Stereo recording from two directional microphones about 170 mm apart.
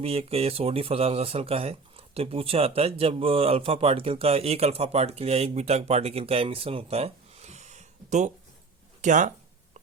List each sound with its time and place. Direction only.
0.0 s speech: 35° right (ahead or behind)